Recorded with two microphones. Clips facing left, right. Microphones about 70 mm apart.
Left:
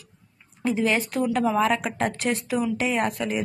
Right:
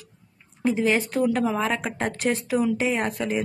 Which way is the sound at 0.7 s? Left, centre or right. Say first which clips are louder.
Right 1 dB; right.